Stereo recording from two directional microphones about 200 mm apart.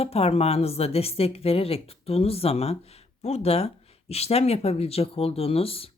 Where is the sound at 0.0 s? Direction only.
30° left (ahead or behind).